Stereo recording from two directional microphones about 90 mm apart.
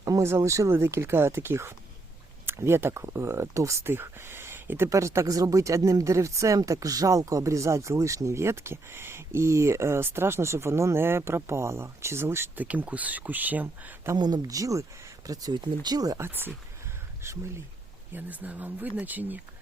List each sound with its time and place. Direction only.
0.0 s speech: 35° right (ahead or behind)
12.6 s speech: 15° right (ahead or behind)
14.2 s speech: 50° right (ahead or behind)
16.1 s speech: 25° right (ahead or behind)
18.1 s speech: 20° right (ahead or behind)